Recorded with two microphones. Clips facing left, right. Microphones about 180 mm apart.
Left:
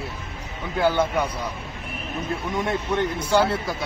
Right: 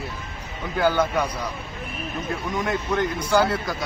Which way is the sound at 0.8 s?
25° left (ahead or behind).